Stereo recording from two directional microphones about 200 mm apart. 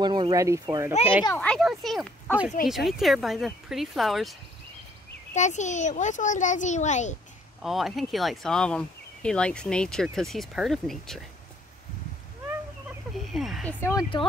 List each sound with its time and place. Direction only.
0.0 s speech: 20° right (ahead or behind)
1.2 s speech: 10° left (ahead or behind)
5.3 s a child's voice: 35° left (ahead or behind)
7.6 s speech: centre (ahead or behind)
13.1 s speech: centre (ahead or behind)
13.7 s speech: 10° left (ahead or behind)